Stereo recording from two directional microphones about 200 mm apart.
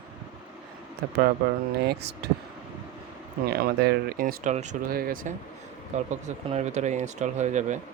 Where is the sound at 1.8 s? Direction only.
55° right (ahead or behind).